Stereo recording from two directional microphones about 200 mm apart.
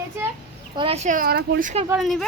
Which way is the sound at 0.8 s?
30° right (ahead or behind).